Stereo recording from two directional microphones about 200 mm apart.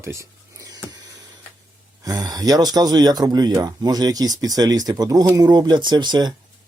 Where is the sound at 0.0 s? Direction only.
15° right (ahead or behind).